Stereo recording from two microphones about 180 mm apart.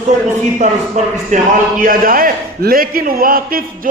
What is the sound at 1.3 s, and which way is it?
A man's voice, 50° right (ahead or behind).